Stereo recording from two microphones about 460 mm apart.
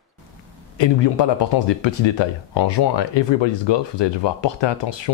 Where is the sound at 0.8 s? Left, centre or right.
Left.